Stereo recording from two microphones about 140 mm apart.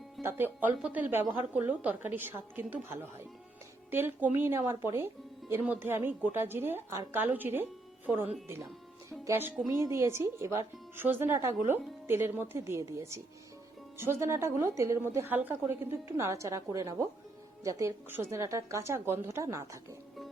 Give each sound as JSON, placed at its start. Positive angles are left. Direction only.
{"t": 0.2, "sound": "speech", "side_deg": -15}
{"t": 9.0, "sound": "music", "side_deg": -20}
{"t": 9.6, "sound": "a woman's voice", "side_deg": -20}